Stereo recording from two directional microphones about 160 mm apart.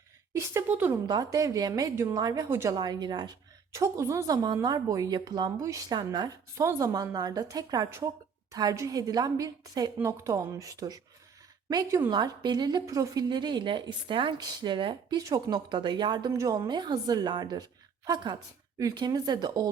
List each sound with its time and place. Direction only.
0.3 s a woman's voice: 15° right (ahead or behind)
1.0 s speech: 25° right (ahead or behind)